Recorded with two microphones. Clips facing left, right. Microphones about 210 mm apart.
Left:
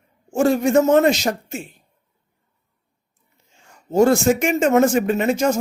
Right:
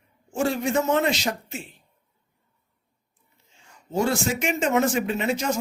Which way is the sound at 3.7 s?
45° left (ahead or behind).